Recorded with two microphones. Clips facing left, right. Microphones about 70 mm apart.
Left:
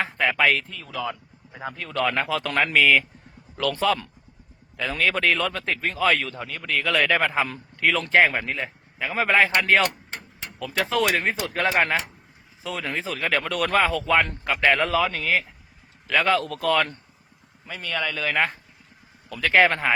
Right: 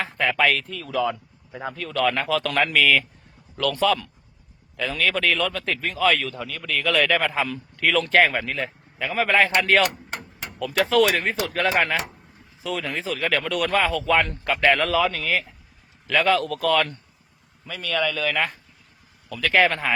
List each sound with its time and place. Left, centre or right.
0.0 s speech: centre
0.7 s speech: centre
1.7 s speech: centre
14.4 s speech: centre